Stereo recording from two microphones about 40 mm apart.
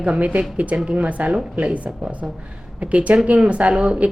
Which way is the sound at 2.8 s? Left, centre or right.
Right.